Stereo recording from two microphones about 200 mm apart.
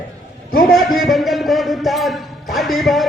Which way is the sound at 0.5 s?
45° left (ahead or behind).